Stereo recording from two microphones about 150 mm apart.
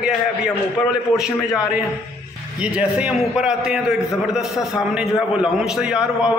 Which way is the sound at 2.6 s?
5° right (ahead or behind).